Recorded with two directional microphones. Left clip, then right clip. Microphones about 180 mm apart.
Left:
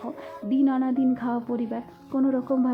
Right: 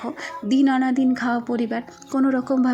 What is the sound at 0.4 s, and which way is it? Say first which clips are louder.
A woman's voice: right 4 dB; 15° right (ahead or behind).